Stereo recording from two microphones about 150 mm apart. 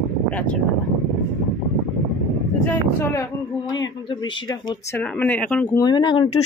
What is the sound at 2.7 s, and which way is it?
Speech, 20° left (ahead or behind).